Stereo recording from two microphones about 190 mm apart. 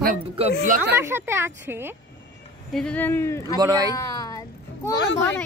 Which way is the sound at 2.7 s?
5° left (ahead or behind).